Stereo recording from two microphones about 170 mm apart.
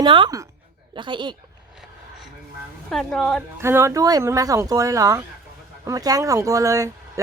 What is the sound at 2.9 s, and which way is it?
Speech, centre (ahead or behind).